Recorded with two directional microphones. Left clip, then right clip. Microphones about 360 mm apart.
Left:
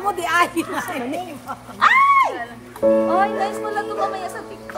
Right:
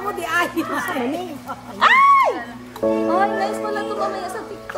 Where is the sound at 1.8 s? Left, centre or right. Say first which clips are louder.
Right 1 dB; centre.